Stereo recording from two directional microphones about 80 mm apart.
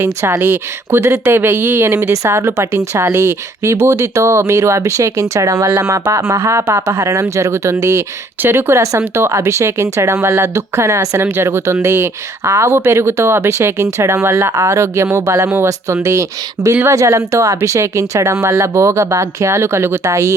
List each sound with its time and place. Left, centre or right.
0.0 s speech: right